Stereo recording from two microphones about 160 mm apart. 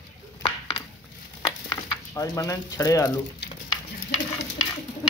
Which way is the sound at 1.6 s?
20° left (ahead or behind).